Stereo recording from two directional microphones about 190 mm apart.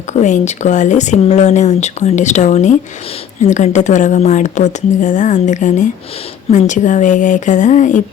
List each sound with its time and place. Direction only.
0.1 s speech: 40° left (ahead or behind)